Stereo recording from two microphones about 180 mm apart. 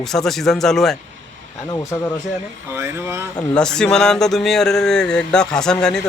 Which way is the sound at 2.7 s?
15° right (ahead or behind).